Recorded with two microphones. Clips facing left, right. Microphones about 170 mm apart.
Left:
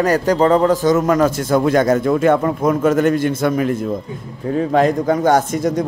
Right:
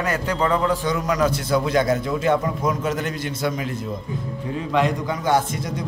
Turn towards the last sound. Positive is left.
turn(degrees=45)  # may be behind; listen again after turning